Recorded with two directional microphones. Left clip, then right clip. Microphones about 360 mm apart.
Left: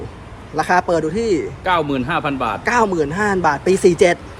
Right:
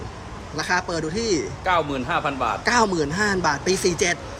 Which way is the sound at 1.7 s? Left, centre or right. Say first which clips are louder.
Left 4 dB; left.